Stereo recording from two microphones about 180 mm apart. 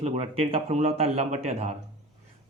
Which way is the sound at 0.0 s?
35° right (ahead or behind).